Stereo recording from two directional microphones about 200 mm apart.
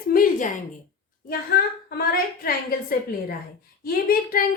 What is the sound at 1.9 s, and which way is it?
Speech, 50° left (ahead or behind).